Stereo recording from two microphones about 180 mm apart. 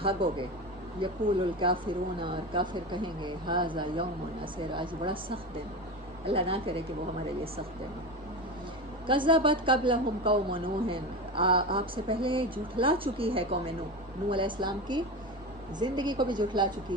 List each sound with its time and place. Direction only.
0.0 s a woman's voice: 30° right (ahead or behind)
9.0 s a woman's voice: 30° right (ahead or behind)